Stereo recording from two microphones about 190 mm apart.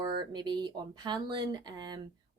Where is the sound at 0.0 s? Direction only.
20° right (ahead or behind).